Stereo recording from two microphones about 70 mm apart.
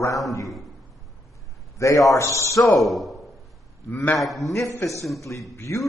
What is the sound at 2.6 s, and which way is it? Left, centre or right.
Speech, centre.